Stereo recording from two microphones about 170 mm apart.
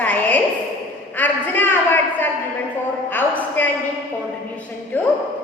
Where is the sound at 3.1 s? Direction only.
10° left (ahead or behind).